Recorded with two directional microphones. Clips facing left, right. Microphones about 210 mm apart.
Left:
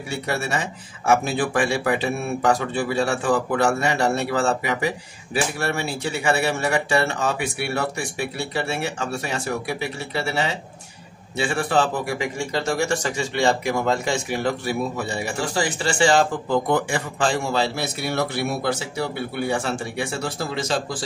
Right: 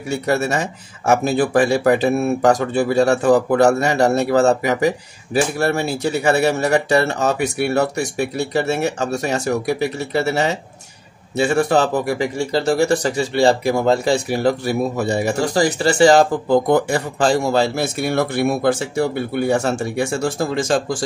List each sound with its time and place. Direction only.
0.1 s speech: 40° right (ahead or behind)